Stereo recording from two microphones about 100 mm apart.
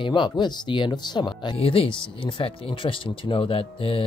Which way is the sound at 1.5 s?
65° left (ahead or behind).